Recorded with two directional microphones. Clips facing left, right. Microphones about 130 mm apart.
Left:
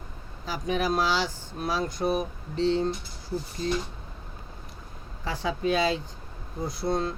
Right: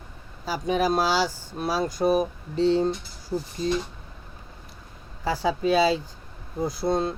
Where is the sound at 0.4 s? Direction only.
35° right (ahead or behind).